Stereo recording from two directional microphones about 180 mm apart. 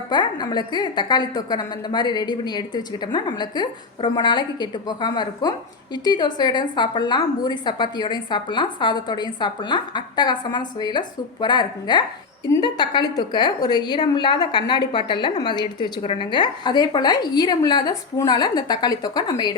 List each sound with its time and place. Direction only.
0.1 s a woman's voice: 25° left (ahead or behind)